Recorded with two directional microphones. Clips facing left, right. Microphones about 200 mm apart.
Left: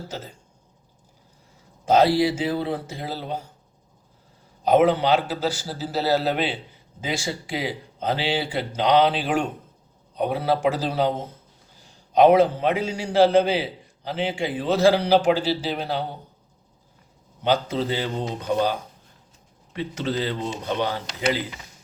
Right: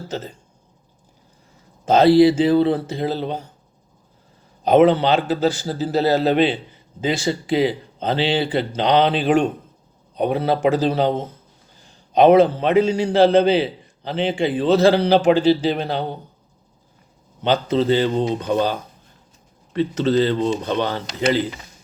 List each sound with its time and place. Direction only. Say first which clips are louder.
1.8 s a man's voice: right 6 dB; 10° left (ahead or behind)
4.7 s a man's voice: right 4 dB; 10° left (ahead or behind)
17.4 s a man's voice: right 4 dB; 10° left (ahead or behind)